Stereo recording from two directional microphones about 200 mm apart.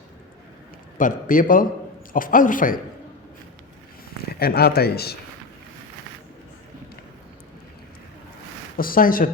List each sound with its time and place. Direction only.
0.9 s speech: 40° left (ahead or behind)
4.4 s speech: 50° left (ahead or behind)
8.8 s speech: 45° left (ahead or behind)